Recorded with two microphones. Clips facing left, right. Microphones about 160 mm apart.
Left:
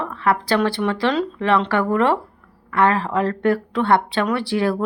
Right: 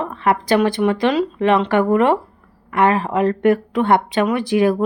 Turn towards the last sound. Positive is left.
turn(degrees=-15)  # may be behind; listen again after turning